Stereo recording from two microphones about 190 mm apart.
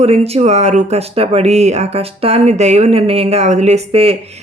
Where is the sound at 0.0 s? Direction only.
35° right (ahead or behind).